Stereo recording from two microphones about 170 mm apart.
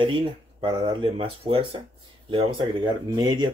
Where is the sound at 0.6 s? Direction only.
30° right (ahead or behind).